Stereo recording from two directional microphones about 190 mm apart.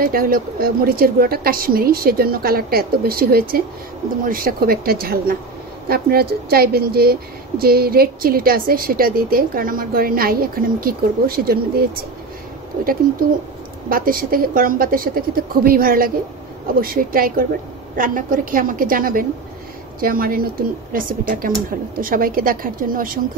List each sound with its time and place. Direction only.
0.0 s a woman's voice: 50° right (ahead or behind)
13.8 s a woman's voice: 50° right (ahead or behind)